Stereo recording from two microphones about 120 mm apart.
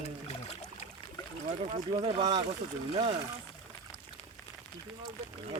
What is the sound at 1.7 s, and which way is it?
Speech, 50° right (ahead or behind).